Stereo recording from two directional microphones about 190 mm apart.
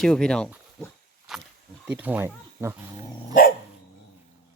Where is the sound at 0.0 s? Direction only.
5° left (ahead or behind).